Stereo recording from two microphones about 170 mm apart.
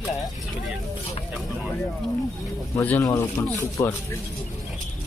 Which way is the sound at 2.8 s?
15° left (ahead or behind).